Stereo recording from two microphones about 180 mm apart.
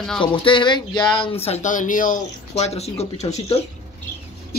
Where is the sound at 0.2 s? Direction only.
25° left (ahead or behind).